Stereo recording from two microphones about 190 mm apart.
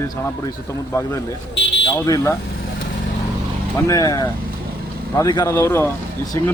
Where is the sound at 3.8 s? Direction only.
20° left (ahead or behind).